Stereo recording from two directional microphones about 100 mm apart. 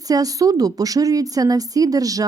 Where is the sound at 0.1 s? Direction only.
35° right (ahead or behind).